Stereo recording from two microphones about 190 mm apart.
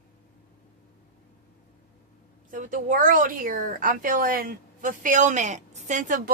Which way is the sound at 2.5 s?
45° right (ahead or behind).